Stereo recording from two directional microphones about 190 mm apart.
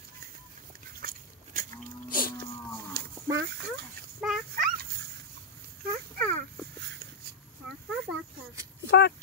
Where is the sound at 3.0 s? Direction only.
60° right (ahead or behind).